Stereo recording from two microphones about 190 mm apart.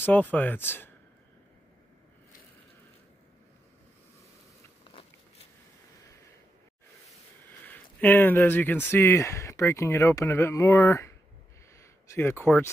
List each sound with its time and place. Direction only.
0.0 s speech: 10° left (ahead or behind)
4.9 s walk: 25° left (ahead or behind)
7.1 s speech: 10° left (ahead or behind)
11.8 s a sound: 15° left (ahead or behind)